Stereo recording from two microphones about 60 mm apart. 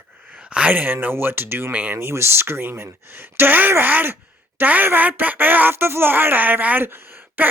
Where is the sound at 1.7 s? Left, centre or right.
Right.